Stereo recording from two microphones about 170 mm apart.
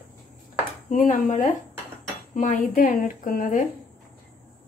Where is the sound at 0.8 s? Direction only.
45° left (ahead or behind).